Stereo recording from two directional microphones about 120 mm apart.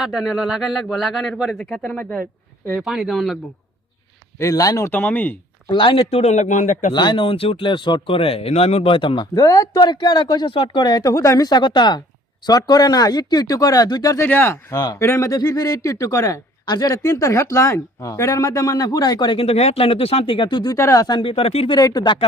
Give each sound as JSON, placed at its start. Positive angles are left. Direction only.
{"t": 0.0, "sound": "speech", "side_deg": -5}
{"t": 2.7, "sound": "speech", "side_deg": -5}
{"t": 4.4, "sound": "speech", "side_deg": 30}
{"t": 4.9, "sound": "speech", "side_deg": 15}
{"t": 5.6, "sound": "speech", "side_deg": 45}
{"t": 6.9, "sound": "speech", "side_deg": 40}
{"t": 14.2, "sound": "speech", "side_deg": 15}
{"t": 20.7, "sound": "speech", "side_deg": 25}
{"t": 21.2, "sound": "speech", "side_deg": 50}
{"t": 21.8, "sound": "speech", "side_deg": 35}